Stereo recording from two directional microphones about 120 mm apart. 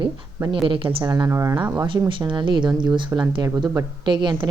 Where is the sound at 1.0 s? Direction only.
30° right (ahead or behind).